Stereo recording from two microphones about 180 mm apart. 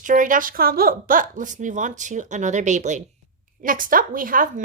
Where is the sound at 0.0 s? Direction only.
45° right (ahead or behind).